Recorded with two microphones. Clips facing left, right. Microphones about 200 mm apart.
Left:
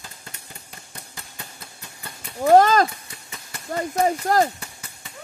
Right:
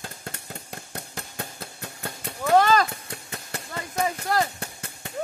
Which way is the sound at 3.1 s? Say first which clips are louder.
Right 6 dB; 60° right (ahead or behind).